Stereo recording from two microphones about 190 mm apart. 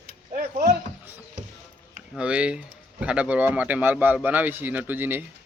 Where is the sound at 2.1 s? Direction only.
5° right (ahead or behind).